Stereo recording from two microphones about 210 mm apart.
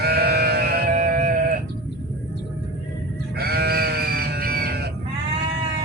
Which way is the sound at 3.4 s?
50° right (ahead or behind).